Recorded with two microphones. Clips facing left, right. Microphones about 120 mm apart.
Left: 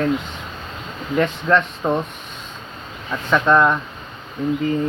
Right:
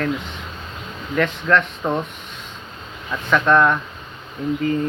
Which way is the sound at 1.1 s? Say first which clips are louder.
Left 1 dB; 20° left (ahead or behind).